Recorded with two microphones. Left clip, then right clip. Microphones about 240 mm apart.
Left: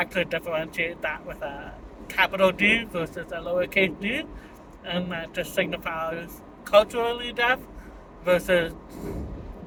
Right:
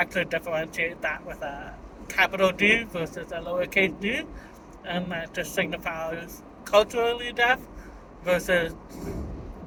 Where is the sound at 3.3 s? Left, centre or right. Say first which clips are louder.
Left 3 dB; centre.